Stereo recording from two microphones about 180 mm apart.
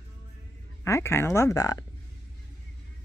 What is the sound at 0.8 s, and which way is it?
Speech, 15° left (ahead or behind).